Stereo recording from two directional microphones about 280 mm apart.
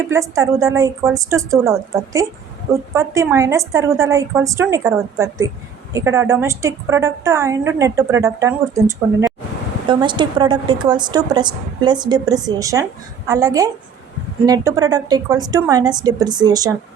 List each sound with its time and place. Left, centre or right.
0.1 s a woman's voice: centre